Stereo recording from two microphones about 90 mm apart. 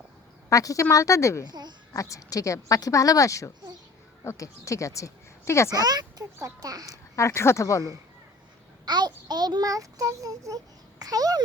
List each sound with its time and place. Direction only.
0.5 s a woman's voice: 40° left (ahead or behind)
1.5 s speech: 50° right (ahead or behind)
1.9 s a woman's voice: 35° left (ahead or behind)
5.7 s a child's voice: 50° right (ahead or behind)
6.9 s a woman's voice: 30° left (ahead or behind)
8.9 s a child's voice: 55° right (ahead or behind)